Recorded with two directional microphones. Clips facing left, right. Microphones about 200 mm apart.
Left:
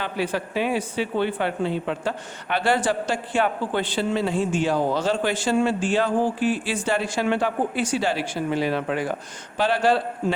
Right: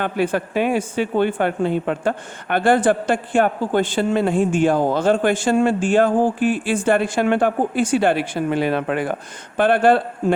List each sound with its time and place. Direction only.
0.0 s a man's voice: 50° right (ahead or behind)